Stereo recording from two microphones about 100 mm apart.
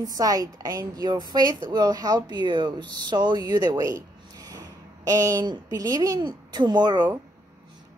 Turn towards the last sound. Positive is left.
turn(degrees=-45)  # may be behind; listen again after turning